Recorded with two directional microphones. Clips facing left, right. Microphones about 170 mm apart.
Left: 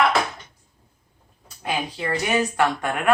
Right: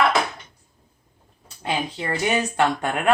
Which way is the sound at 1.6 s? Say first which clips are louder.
Even; 25° right (ahead or behind).